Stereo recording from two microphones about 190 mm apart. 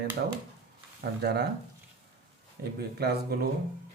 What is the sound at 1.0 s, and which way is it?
Speech, 60° right (ahead or behind).